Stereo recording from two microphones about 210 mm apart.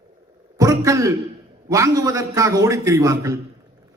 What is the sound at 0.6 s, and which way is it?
A man's voice, 15° right (ahead or behind).